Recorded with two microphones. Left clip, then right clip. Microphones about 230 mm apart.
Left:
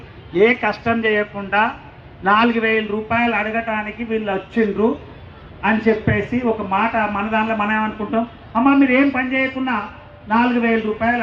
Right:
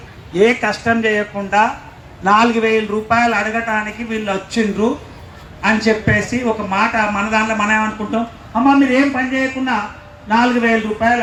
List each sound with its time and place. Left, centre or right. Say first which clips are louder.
0.3 s a man's voice: right 1 dB; right
8.9 s a man's voice: right 1 dB; right